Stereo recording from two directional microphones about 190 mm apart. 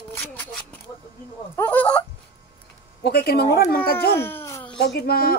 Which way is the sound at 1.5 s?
10° left (ahead or behind).